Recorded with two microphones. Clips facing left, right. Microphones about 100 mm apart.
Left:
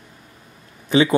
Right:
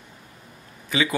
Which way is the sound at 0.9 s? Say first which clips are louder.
Left 8 dB; 30° left (ahead or behind).